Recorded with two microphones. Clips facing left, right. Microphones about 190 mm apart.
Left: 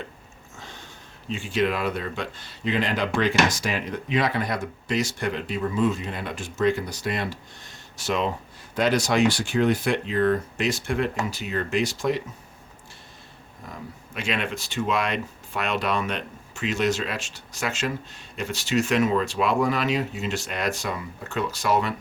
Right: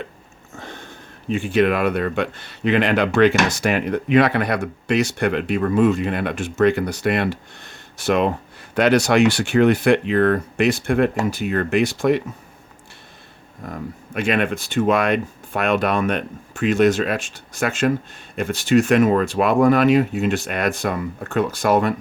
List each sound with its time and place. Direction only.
0.5 s speech: 55° right (ahead or behind)
13.7 s speech: 55° right (ahead or behind)